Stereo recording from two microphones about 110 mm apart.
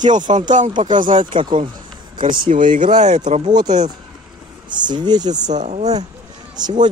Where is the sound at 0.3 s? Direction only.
70° right (ahead or behind).